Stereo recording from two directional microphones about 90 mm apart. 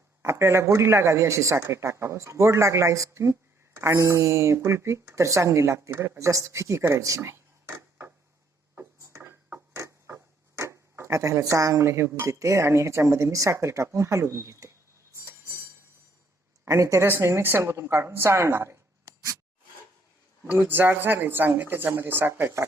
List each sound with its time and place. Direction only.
0.2 s speech: 30° right (ahead or behind)
9.0 s a sound: 35° right (ahead or behind)
9.7 s speech: 35° right (ahead or behind)
16.6 s a woman's voice: 35° right (ahead or behind)
20.5 s speech: 20° right (ahead or behind)